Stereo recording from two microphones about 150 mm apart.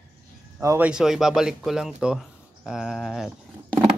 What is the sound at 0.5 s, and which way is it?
Speech, 15° right (ahead or behind).